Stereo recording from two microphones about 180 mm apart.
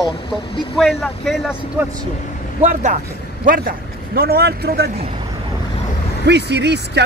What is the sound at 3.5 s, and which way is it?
A man's voice, 55° right (ahead or behind).